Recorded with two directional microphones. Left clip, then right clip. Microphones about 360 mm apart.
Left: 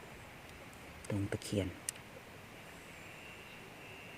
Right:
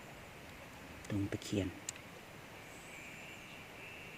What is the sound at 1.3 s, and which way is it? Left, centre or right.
Speech, centre.